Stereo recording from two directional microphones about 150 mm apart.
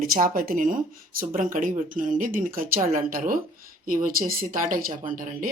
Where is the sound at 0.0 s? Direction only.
70° right (ahead or behind).